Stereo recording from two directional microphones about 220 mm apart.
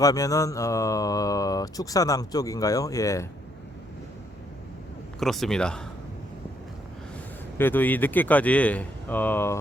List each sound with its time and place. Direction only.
0.0 s speech: 15° left (ahead or behind)
5.2 s speech: centre (ahead or behind)
7.6 s speech: 10° left (ahead or behind)